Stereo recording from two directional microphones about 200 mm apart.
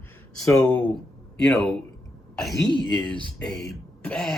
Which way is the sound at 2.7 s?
25° right (ahead or behind).